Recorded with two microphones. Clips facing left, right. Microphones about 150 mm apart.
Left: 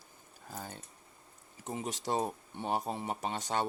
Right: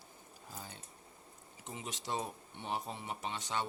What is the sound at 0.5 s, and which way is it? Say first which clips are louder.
Speech: left 6 dB; 50° left (ahead or behind).